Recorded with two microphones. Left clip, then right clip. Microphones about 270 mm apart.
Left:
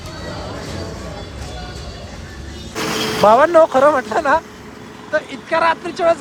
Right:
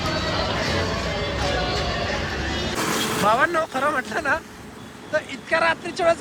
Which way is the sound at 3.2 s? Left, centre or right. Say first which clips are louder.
Left 11 dB; centre.